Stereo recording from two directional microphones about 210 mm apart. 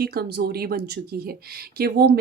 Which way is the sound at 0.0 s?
50° right (ahead or behind).